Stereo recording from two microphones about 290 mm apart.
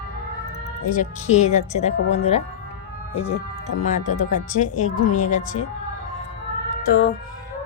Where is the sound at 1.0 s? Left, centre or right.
Left.